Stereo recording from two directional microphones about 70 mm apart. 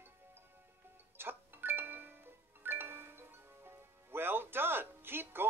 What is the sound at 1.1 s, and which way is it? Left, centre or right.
Music, right.